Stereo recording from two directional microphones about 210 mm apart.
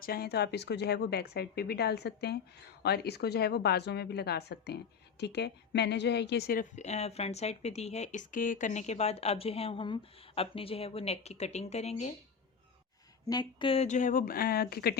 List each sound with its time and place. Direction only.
0.0 s a woman's voice: 45° left (ahead or behind)
13.2 s a woman's voice: 20° left (ahead or behind); by 14.9 s 50° left (ahead or behind)